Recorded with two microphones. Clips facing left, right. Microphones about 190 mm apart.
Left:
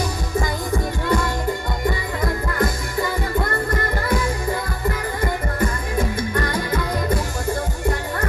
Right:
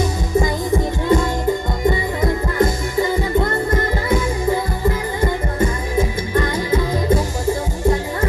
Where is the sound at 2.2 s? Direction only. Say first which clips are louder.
Right 4 dB; 25° right (ahead or behind).